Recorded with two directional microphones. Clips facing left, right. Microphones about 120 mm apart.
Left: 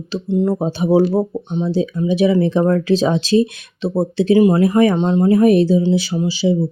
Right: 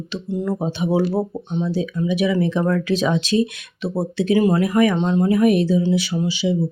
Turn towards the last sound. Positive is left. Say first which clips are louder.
# left 4 dB
turn(degrees=35)  # may be behind; listen again after turning